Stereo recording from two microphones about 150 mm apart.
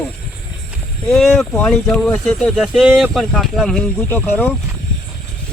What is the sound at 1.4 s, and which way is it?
Speech, 5° left (ahead or behind).